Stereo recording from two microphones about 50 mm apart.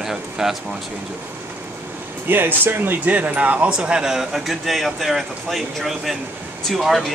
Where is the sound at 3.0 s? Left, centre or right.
Right.